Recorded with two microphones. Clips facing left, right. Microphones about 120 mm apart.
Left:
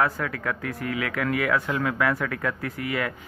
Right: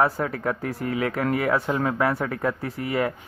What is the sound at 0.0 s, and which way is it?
Speech, 30° right (ahead or behind).